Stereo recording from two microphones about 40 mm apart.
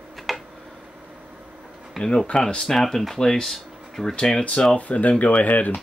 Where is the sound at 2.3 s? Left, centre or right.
Left.